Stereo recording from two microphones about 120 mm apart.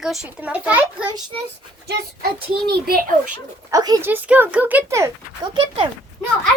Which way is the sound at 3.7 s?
30° right (ahead or behind).